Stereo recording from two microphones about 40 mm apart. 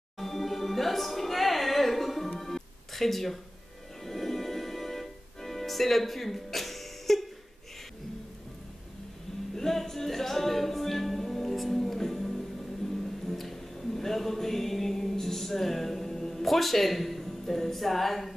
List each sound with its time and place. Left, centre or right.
0.2 s music: centre
9.6 s a capella: centre